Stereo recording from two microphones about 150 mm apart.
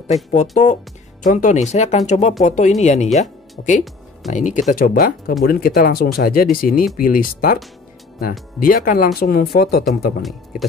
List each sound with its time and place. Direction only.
0.3 s speech: 50° left (ahead or behind); by 9.8 s 85° left